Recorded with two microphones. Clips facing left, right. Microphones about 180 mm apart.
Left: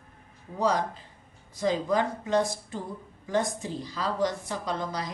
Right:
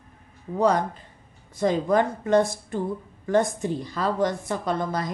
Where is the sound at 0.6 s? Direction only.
55° right (ahead or behind).